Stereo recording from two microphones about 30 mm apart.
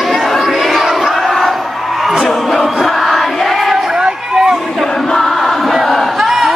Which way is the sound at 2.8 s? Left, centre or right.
Centre.